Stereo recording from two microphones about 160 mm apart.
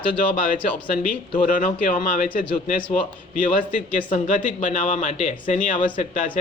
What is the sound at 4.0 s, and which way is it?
Speech, 55° left (ahead or behind).